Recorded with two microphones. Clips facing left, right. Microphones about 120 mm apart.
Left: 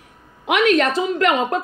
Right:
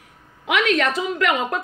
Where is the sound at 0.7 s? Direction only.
35° left (ahead or behind).